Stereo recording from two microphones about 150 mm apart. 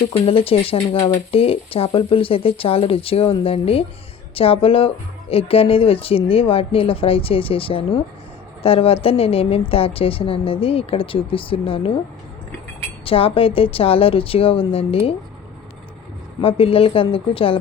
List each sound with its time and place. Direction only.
0.0 s speech: 40° left (ahead or behind)
13.1 s speech: 40° left (ahead or behind)
16.4 s speech: 40° left (ahead or behind)